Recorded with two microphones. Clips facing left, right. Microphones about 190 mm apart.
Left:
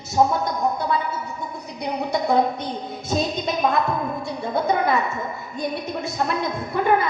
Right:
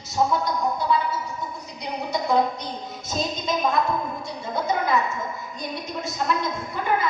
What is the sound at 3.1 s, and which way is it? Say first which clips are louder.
Speech: left 3 dB; 60° left (ahead or behind).